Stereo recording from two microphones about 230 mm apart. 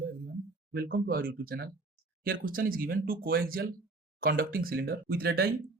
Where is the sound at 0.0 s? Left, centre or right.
Right.